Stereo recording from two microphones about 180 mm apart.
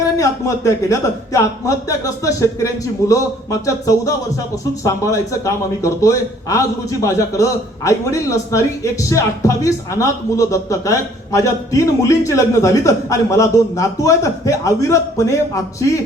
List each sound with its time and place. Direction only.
0.2 s a man's voice: 15° left (ahead or behind)